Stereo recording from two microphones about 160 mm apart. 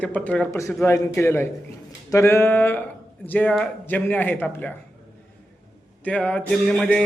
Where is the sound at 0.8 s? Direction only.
15° left (ahead or behind).